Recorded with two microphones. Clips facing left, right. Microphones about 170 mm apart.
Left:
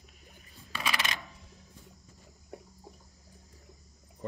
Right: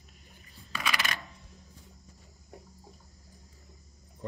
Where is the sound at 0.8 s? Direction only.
25° left (ahead or behind).